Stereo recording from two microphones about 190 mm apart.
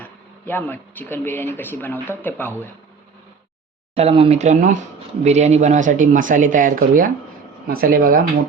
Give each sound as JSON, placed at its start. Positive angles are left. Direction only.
{"t": 0.0, "sound": "speech", "side_deg": 10}
{"t": 3.9, "sound": "speech", "side_deg": -30}